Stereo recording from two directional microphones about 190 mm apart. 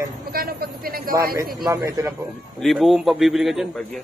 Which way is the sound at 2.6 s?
Centre (ahead or behind).